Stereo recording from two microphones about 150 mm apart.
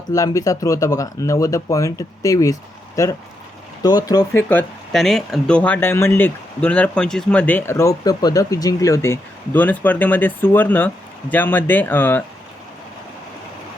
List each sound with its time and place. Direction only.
0.1 s speech: 20° left (ahead or behind)
4.4 s speech: 10° left (ahead or behind)